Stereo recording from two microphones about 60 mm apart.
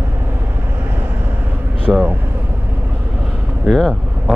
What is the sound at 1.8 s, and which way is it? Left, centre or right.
Vehicle, right.